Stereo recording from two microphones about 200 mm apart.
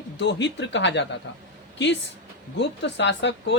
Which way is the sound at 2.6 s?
60° left (ahead or behind).